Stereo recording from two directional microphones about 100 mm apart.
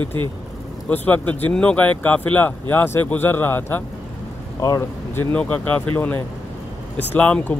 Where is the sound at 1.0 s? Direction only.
15° left (ahead or behind).